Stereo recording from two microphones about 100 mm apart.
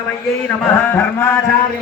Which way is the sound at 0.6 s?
20° left (ahead or behind).